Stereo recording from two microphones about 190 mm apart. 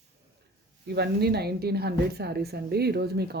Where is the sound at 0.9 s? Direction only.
60° right (ahead or behind).